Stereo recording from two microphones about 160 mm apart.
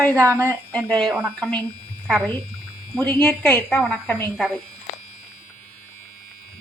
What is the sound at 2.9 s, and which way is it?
A woman's voice, 10° left (ahead or behind).